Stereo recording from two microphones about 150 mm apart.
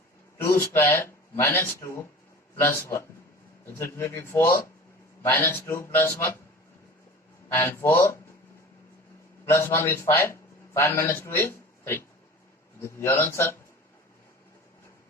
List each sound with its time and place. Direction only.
0.3 s a man's voice: 15° left (ahead or behind)
7.5 s a man's voice: 15° left (ahead or behind)
9.6 s a man's voice: 15° left (ahead or behind)